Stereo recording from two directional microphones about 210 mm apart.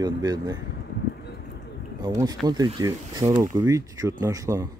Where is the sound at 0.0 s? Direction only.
20° right (ahead or behind).